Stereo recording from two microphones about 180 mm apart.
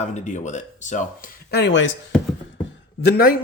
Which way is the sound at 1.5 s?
70° left (ahead or behind).